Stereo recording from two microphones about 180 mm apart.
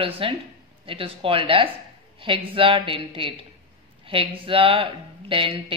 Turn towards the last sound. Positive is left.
turn(degrees=-30)  # may be behind; listen again after turning